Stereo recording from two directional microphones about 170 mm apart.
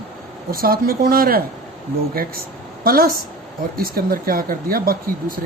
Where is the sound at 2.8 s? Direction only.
60° right (ahead or behind).